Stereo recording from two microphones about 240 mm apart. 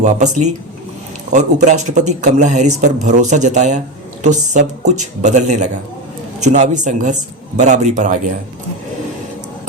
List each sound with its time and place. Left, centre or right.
0.0 s speech: right